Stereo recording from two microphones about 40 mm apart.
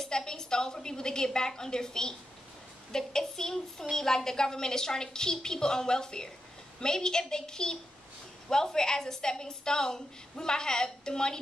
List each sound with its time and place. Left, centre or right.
0.0 s a woman's voice: centre